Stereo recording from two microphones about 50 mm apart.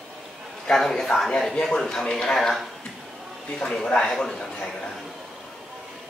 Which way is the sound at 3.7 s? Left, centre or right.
Centre.